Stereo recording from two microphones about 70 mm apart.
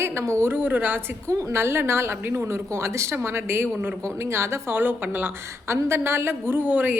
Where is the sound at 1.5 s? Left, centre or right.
Right.